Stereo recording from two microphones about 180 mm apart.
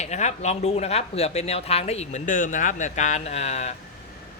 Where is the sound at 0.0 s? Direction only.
40° left (ahead or behind).